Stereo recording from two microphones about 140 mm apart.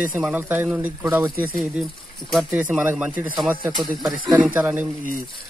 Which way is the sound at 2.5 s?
10° right (ahead or behind).